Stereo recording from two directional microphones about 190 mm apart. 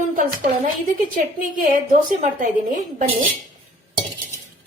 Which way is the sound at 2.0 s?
40° right (ahead or behind).